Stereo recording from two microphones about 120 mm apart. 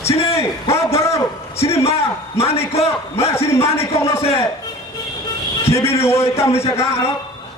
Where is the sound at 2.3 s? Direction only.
55° left (ahead or behind).